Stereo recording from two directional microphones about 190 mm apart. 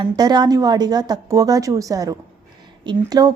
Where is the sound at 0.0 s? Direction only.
20° right (ahead or behind).